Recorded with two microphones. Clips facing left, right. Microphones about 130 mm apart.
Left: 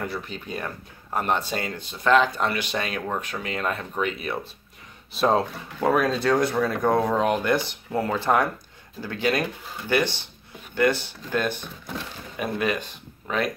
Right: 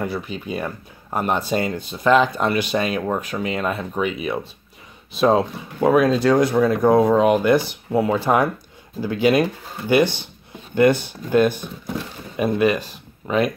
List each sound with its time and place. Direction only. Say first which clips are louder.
0.0 s speech: right 5 dB; 10° right (ahead or behind)
5.1 s speech: right 4 dB; centre (ahead or behind)